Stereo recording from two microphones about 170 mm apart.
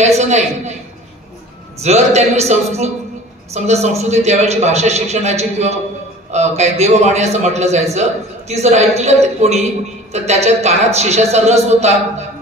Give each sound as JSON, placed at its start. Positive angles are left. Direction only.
{"t": 0.2, "sound": "a man's voice", "side_deg": -40}
{"t": 1.8, "sound": "a man's voice", "side_deg": -40}